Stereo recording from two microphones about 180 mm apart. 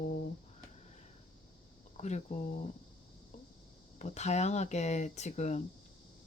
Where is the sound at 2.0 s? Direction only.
40° left (ahead or behind).